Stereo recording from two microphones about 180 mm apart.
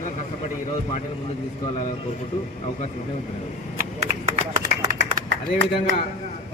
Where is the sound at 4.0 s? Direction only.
50° right (ahead or behind).